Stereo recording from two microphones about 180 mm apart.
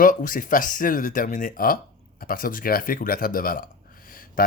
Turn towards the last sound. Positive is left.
turn(degrees=50)  # may be behind; listen again after turning